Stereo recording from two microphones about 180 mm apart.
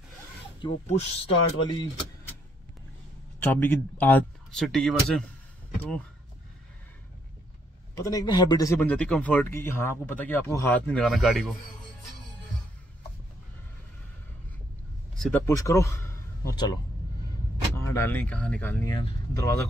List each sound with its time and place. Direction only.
0.8 s speech: 40° left (ahead or behind)
3.3 s speech: 10° left (ahead or behind)
7.9 s speech: 20° left (ahead or behind); by 11.5 s centre (ahead or behind)
15.1 s speech: 5° left (ahead or behind)
15.4 s speech: 15° left (ahead or behind)
17.7 s speech: 15° left (ahead or behind)